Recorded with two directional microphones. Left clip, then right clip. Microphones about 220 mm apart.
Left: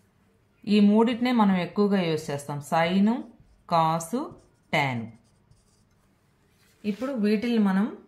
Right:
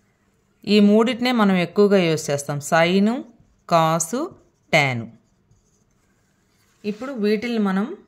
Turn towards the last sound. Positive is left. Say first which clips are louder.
# right 3 dB
turn(degrees=-40)  # may be behind; listen again after turning